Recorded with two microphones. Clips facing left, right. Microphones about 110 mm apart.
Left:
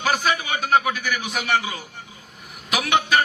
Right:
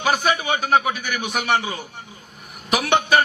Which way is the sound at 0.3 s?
65° right (ahead or behind).